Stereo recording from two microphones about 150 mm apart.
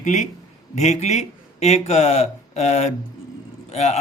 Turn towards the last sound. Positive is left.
turn(degrees=45)  # may be behind; listen again after turning